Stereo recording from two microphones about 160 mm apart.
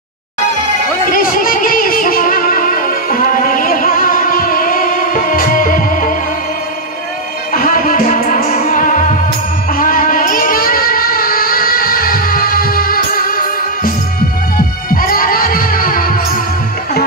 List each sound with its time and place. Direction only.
1.1 s music: 60° left (ahead or behind)
7.5 s music: 60° left (ahead or behind)
9.7 s child singing: 60° left (ahead or behind)
15.0 s music: 65° left (ahead or behind)